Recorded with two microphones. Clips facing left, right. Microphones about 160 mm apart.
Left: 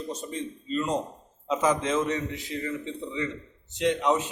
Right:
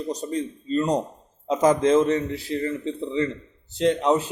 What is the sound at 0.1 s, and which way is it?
A man's voice, 40° right (ahead or behind).